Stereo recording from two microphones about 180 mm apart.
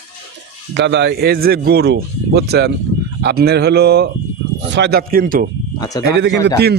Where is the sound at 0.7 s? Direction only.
75° right (ahead or behind); by 5.5 s 50° right (ahead or behind).